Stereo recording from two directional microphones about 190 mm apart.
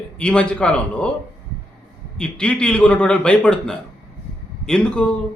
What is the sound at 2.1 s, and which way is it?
Speech, 5° left (ahead or behind).